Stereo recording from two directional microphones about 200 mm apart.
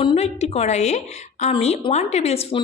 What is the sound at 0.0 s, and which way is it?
A woman's voice, 30° left (ahead or behind).